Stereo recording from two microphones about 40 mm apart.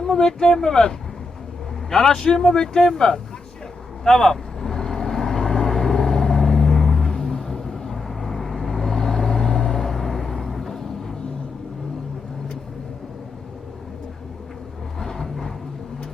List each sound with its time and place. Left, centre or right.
0.0 s speech: centre
4.0 s vehicle: centre
14.9 s a sound: centre